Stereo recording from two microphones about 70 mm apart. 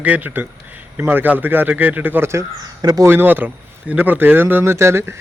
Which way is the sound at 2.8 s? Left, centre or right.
Right.